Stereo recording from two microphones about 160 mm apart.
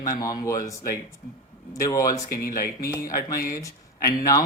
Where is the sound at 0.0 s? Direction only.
25° left (ahead or behind).